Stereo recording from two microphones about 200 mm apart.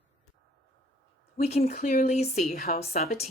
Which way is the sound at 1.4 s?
35° left (ahead or behind).